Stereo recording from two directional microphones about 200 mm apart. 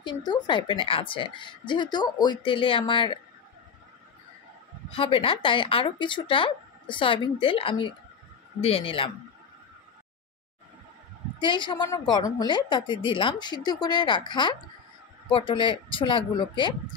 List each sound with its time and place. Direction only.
0.0 s a woman's voice: 20° left (ahead or behind)
4.9 s a woman's voice: 25° left (ahead or behind)
11.3 s a woman's voice: 25° left (ahead or behind)